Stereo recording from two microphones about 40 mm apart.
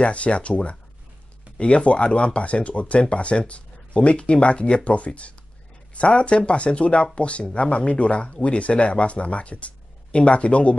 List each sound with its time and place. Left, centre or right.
0.0 s speech: left